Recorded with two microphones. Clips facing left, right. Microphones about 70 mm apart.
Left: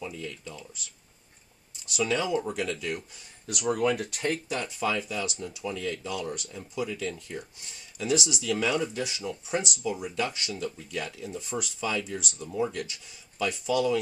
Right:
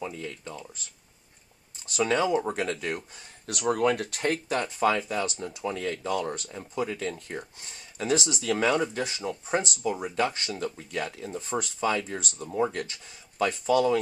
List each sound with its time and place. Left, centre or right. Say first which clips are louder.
0.0 s speech: right 2 dB; right
1.9 s speech: right 3 dB; right
3.5 s speech: right 2 dB; right
4.6 s speech: right 5 dB; right